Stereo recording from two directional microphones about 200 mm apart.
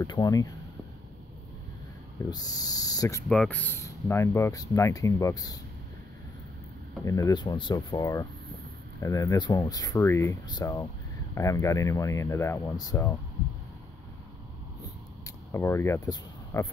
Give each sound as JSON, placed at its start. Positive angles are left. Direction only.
{"t": 0.0, "sound": "speech", "side_deg": 20}
{"t": 2.2, "sound": "speech", "side_deg": 20}
{"t": 3.3, "sound": "speech", "side_deg": 5}
{"t": 7.1, "sound": "speech", "side_deg": 15}
{"t": 15.2, "sound": "a sound", "side_deg": 10}